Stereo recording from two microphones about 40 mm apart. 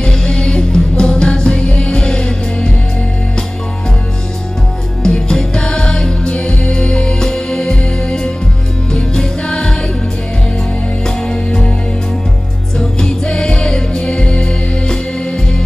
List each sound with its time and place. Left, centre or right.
0.0 s music: centre
5.0 s music: centre
11.1 s music: centre
12.7 s music: centre